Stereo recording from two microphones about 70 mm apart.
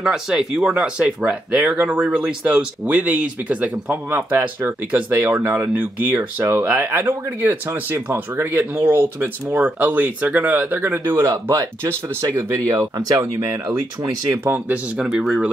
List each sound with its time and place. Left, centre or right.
0.0 s speech: centre; by 14.4 s right
14.7 s speech: centre